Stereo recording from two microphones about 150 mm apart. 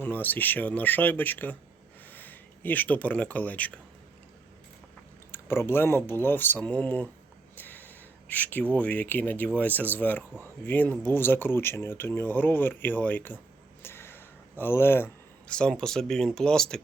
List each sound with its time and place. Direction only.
0.0 s speech: 10° left (ahead or behind)
5.3 s speech: 15° left (ahead or behind)
13.8 s a sound: 15° left (ahead or behind)
14.6 s speech: 15° left (ahead or behind)